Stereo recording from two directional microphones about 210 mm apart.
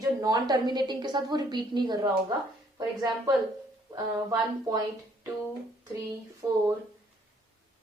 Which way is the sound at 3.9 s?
15° right (ahead or behind).